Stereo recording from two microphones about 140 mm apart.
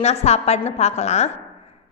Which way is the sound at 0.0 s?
50° left (ahead or behind).